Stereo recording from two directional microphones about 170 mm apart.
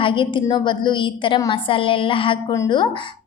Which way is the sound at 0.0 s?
30° left (ahead or behind).